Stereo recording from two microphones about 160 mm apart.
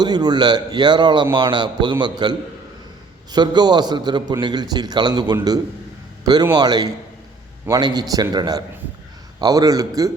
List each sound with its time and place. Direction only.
0.0 s a man's voice: 25° right (ahead or behind)
3.3 s a man's voice: 25° right (ahead or behind)